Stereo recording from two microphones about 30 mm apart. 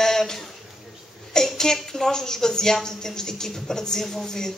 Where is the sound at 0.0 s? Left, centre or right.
Centre.